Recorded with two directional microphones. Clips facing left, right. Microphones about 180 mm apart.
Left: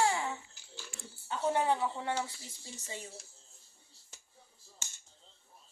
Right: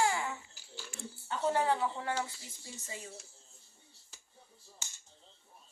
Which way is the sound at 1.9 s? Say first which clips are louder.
Left 1 dB; 25° left (ahead or behind).